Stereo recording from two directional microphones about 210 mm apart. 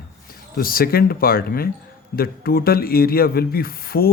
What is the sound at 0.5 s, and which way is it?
A man's voice, 45° left (ahead or behind).